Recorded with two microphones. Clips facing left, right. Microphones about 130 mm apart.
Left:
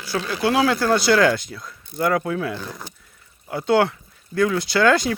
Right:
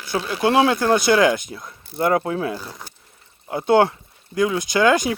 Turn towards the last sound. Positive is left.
turn(degrees=-15)  # may be behind; listen again after turning